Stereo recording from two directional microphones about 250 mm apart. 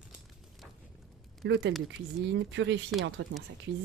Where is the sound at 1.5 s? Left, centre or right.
Right.